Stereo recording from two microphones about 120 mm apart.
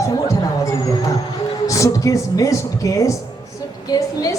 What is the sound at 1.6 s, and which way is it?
A woman's voice, 25° left (ahead or behind).